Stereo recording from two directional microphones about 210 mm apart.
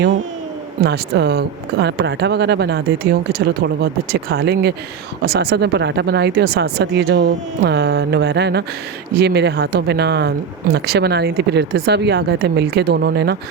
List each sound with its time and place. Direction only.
0.9 s speech: 55° right (ahead or behind)